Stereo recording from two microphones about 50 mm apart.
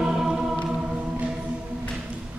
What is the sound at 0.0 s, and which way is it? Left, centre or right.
Music, centre.